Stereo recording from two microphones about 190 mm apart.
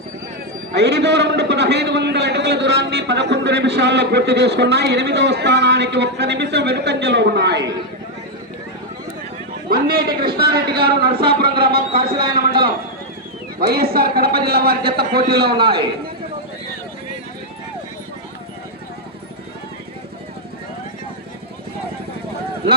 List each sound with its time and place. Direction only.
0.7 s a man's voice: 65° right (ahead or behind)
9.6 s a man's voice: 50° right (ahead or behind)